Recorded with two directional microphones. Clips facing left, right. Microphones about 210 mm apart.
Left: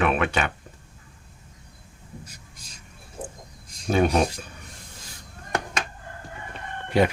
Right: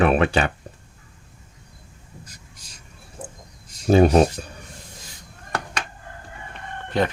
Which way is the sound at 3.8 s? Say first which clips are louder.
Right 6 dB; 30° right (ahead or behind).